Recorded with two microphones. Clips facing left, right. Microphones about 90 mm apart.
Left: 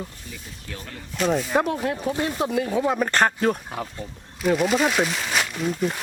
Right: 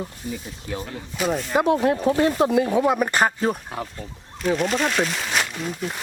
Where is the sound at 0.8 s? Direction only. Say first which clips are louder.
Right 6 dB; 15° right (ahead or behind).